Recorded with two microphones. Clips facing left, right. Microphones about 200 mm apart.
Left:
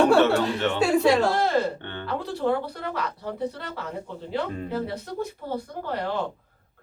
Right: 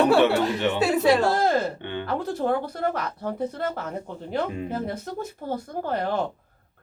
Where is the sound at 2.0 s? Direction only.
45° right (ahead or behind).